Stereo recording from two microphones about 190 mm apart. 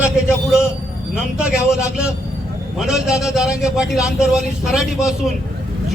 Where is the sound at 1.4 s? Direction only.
5° right (ahead or behind).